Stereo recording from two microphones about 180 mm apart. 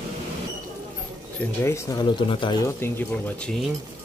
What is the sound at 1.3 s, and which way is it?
Speech, 15° left (ahead or behind).